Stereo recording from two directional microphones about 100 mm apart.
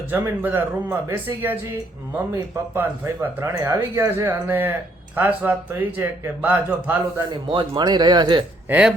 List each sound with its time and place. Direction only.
0.1 s speech: 20° right (ahead or behind)
7.2 s speech: 45° right (ahead or behind)
8.7 s speech: 10° right (ahead or behind)